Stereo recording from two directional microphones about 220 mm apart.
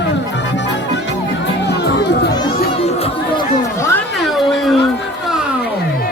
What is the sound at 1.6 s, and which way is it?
Music, 45° left (ahead or behind).